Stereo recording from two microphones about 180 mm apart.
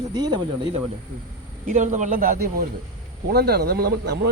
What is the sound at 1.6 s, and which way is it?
A man's voice, 40° right (ahead or behind).